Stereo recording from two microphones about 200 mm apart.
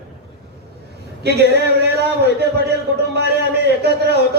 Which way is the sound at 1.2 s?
55° right (ahead or behind).